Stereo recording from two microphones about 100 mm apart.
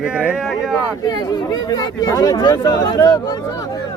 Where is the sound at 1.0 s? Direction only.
45° left (ahead or behind).